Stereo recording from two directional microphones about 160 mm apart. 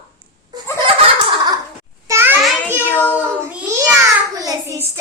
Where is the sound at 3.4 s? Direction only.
15° right (ahead or behind).